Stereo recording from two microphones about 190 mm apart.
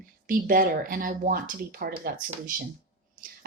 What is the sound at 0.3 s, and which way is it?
A woman's voice, 50° right (ahead or behind).